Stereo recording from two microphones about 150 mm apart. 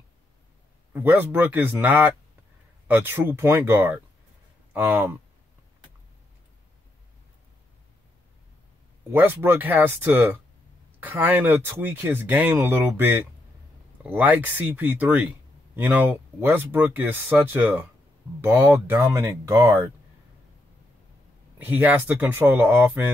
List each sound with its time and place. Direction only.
0.9 s speech: 10° right (ahead or behind)
9.1 s speech: 15° right (ahead or behind)
21.5 s speech: 10° right (ahead or behind)